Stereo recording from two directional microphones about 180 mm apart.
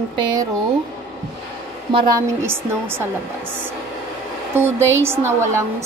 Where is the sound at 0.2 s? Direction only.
20° right (ahead or behind).